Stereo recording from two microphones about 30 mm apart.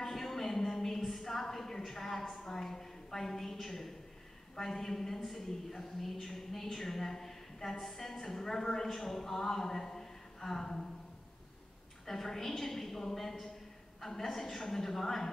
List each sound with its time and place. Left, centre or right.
0.0 s a sound: centre
3.6 s a woman's voice: centre
12.1 s speech: centre